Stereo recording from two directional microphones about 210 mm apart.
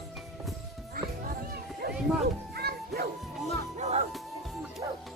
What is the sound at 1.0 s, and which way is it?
Music, 45° right (ahead or behind).